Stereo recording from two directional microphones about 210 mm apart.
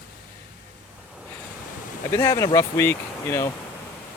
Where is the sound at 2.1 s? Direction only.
15° left (ahead or behind).